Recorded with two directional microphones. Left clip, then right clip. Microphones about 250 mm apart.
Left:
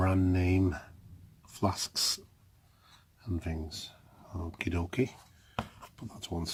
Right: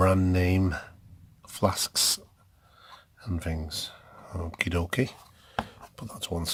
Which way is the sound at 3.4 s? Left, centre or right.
Right.